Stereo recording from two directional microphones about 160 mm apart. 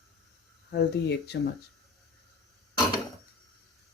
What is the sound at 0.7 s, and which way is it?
Speech, 90° left.